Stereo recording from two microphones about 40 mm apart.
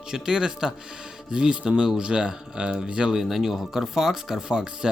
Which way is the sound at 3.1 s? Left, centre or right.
Centre.